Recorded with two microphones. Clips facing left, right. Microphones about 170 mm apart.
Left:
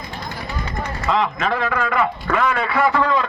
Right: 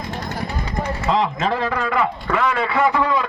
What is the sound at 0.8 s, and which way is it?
Speech, 30° right (ahead or behind).